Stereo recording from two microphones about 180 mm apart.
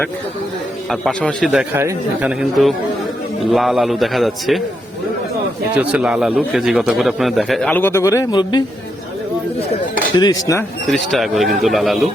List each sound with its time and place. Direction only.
0.9 s speech: centre (ahead or behind)
5.7 s speech: 10° right (ahead or behind); by 8.6 s 25° left (ahead or behind)
10.2 s speech: 20° left (ahead or behind)
10.8 s speech: centre (ahead or behind)